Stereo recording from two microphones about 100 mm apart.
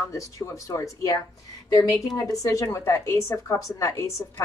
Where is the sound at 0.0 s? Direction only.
30° left (ahead or behind).